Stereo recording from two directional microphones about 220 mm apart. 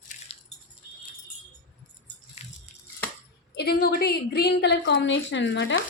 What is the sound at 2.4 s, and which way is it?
Drip, 30° left (ahead or behind).